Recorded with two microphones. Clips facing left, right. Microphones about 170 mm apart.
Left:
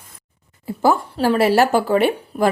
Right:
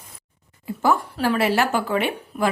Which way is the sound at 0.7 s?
35° left (ahead or behind).